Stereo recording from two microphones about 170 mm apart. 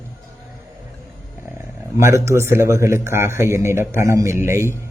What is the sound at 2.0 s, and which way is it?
A man's voice, 15° right (ahead or behind).